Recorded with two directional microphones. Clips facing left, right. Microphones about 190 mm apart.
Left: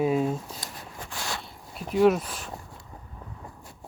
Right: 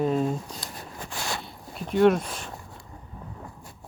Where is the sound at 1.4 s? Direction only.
5° left (ahead or behind).